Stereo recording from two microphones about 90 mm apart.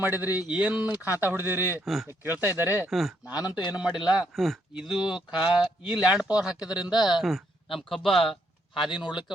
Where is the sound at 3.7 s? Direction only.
10° right (ahead or behind).